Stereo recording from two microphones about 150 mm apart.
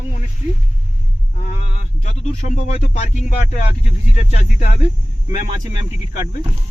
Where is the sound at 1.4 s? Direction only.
50° left (ahead or behind).